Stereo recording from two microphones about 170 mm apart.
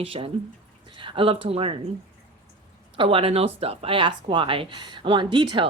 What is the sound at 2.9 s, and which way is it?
Speech, 30° right (ahead or behind).